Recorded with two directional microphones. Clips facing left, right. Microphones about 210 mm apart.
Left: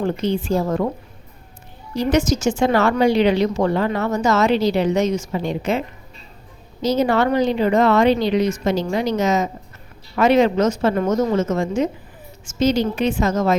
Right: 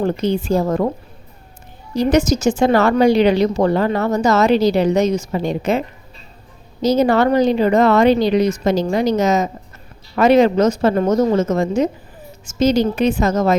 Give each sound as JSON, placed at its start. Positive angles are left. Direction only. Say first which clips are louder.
{"t": 0.0, "sound": "a woman's voice", "louder": "right 3 dB", "side_deg": -40}
{"t": 2.0, "sound": "a woman's voice", "louder": "right 3 dB", "side_deg": -40}
{"t": 6.8, "sound": "a woman's voice", "louder": "right 3 dB", "side_deg": -40}